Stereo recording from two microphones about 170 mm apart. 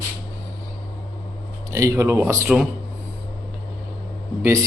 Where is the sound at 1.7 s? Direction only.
20° right (ahead or behind).